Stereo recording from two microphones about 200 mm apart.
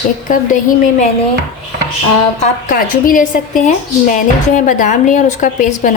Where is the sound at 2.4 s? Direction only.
45° left (ahead or behind).